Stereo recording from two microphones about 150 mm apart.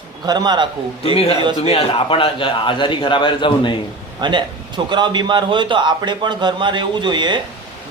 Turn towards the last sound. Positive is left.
turn(degrees=-30)  # may be behind; listen again after turning